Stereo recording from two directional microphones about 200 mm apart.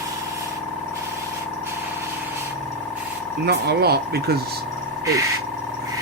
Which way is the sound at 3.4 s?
55° right (ahead or behind).